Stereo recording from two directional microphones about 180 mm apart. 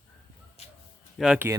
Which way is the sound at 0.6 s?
35° left (ahead or behind).